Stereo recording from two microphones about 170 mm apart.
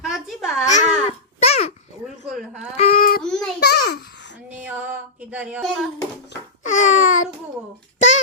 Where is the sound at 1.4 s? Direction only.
35° left (ahead or behind).